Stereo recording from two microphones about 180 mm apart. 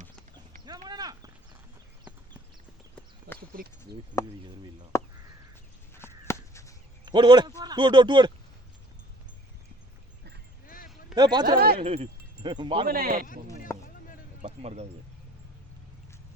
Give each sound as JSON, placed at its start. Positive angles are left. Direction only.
{"t": 0.9, "sound": "a sound", "side_deg": -20}
{"t": 3.5, "sound": "a sound", "side_deg": -60}
{"t": 4.1, "sound": "speech", "side_deg": 15}
{"t": 4.9, "sound": "crow", "side_deg": 15}
{"t": 5.9, "sound": "a sound", "side_deg": 15}
{"t": 7.0, "sound": "a man's voice", "side_deg": -25}
{"t": 11.1, "sound": "speech", "side_deg": -25}
{"t": 11.4, "sound": "speech", "side_deg": -55}
{"t": 11.8, "sound": "speech", "side_deg": -35}
{"t": 12.9, "sound": "speech", "side_deg": -55}
{"t": 13.7, "sound": "a sound", "side_deg": 15}
{"t": 14.4, "sound": "speech", "side_deg": -35}